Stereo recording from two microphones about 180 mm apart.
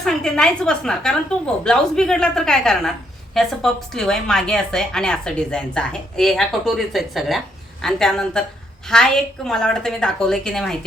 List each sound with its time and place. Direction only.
0.0 s a woman's voice: 5° left (ahead or behind)